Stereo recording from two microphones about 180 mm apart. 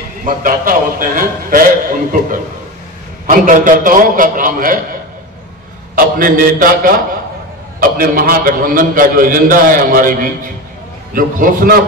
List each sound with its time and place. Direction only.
0.2 s a man's voice: 50° right (ahead or behind)
5.9 s a man's voice: 50° right (ahead or behind)
8.0 s a man's voice: 50° right (ahead or behind)